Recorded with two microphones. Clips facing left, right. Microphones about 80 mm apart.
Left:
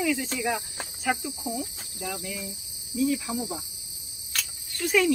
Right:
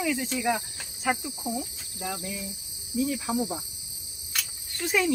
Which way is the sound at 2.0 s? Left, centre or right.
Right.